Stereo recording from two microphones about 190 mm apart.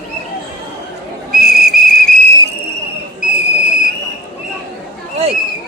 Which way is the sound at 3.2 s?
40° left (ahead or behind).